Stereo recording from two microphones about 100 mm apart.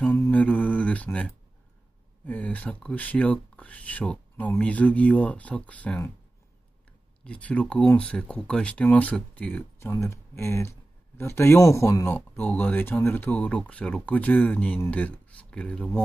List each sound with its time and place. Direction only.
0.0 s mantra: 15° left (ahead or behind)
2.2 s speech: 15° left (ahead or behind)
7.2 s speech: 15° left (ahead or behind)